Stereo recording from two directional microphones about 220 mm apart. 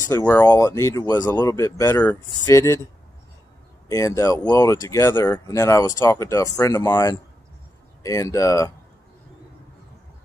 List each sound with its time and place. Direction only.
0.1 s speech: 10° left (ahead or behind)
3.9 s speech: 15° left (ahead or behind)